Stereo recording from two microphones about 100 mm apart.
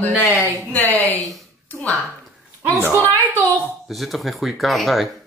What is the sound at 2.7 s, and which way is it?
Speech, 25° right (ahead or behind).